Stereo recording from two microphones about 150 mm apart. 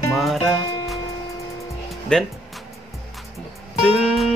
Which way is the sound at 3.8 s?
Centre (ahead or behind).